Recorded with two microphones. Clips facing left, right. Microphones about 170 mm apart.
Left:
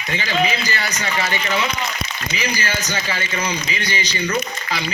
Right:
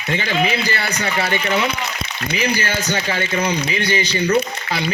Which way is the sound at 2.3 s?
50° right (ahead or behind).